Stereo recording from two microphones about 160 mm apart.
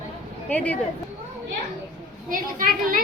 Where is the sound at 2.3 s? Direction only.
60° right (ahead or behind).